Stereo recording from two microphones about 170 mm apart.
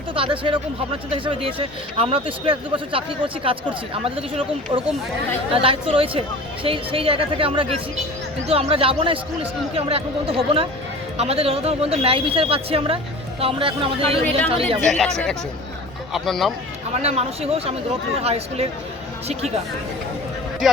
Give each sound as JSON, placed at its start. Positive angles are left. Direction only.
{"t": 0.1, "sound": "speech", "side_deg": -30}
{"t": 14.8, "sound": "speech", "side_deg": 0}
{"t": 17.0, "sound": "speech", "side_deg": -35}